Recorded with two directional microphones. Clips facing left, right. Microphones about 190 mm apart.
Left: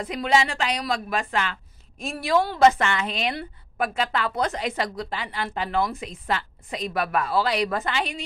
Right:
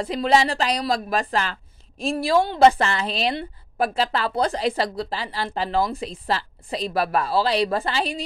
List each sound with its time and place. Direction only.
0.0 s speech: 30° right (ahead or behind)